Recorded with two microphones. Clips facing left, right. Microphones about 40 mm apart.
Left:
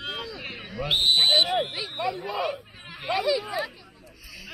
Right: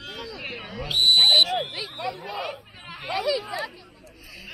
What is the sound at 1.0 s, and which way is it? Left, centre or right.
Speech, right.